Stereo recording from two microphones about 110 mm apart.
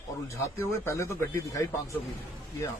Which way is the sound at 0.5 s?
25° left (ahead or behind).